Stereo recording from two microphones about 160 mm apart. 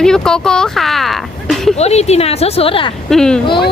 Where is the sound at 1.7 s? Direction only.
40° left (ahead or behind).